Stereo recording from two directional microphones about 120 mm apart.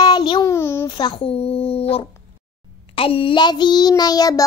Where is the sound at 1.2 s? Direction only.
55° left (ahead or behind).